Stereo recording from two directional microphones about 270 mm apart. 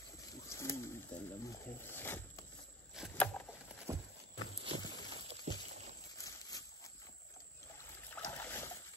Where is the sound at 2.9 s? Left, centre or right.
Centre.